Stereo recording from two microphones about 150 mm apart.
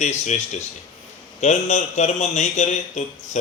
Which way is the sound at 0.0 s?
50° left (ahead or behind).